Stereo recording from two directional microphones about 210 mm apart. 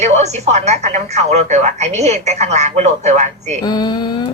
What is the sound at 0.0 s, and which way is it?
Speech, 30° right (ahead or behind).